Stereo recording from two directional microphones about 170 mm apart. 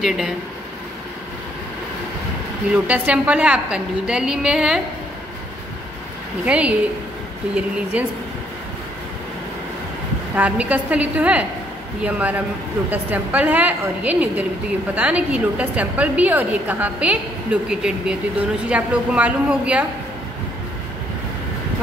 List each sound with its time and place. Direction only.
0.0 s a woman's voice: centre (ahead or behind)
2.7 s a woman's voice: 5° right (ahead or behind)
6.4 s a woman's voice: 5° right (ahead or behind)
7.9 s a woman's voice: 5° right (ahead or behind)
10.3 s a woman's voice: 10° right (ahead or behind)